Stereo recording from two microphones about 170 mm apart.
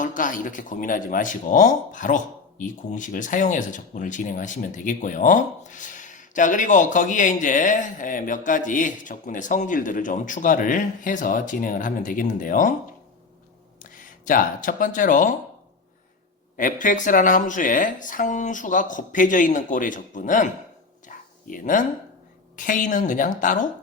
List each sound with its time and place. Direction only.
0.0 s speech: 50° left (ahead or behind)
13.9 s speech: 55° left (ahead or behind)
16.6 s speech: 50° left (ahead or behind)
21.1 s a sound: 50° left (ahead or behind)
22.5 s speech: 50° left (ahead or behind)